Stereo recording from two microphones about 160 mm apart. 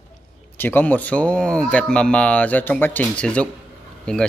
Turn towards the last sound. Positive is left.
turn(degrees=5)  # may be behind; listen again after turning